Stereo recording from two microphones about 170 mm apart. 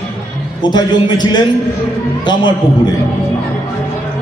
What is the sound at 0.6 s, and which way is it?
Speech, 25° left (ahead or behind).